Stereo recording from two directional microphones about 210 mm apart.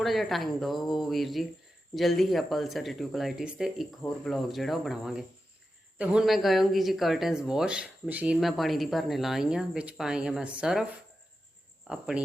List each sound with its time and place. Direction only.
0.0 s speech: centre (ahead or behind)
11.9 s speech: 5° right (ahead or behind)